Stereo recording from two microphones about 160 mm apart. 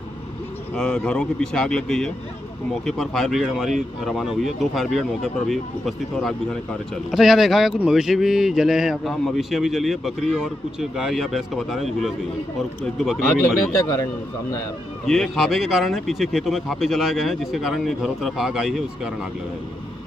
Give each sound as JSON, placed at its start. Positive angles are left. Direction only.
{"t": 0.7, "sound": "speech", "side_deg": 5}
{"t": 13.7, "sound": "a man's voice", "side_deg": 20}
{"t": 15.0, "sound": "speech", "side_deg": 0}